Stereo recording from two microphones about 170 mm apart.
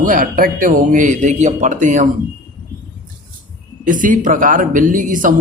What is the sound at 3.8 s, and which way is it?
A man's voice, 50° right (ahead or behind).